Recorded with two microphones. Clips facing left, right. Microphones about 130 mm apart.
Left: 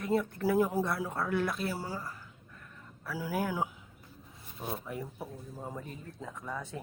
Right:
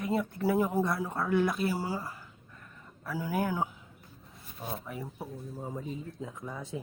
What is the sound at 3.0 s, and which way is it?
Speech, 5° left (ahead or behind).